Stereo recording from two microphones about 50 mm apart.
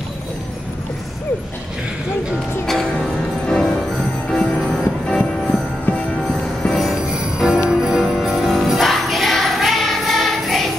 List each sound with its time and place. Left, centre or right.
3.4 s music: centre
5.9 s music: left
6.2 s music: centre
7.3 s jingle bell: centre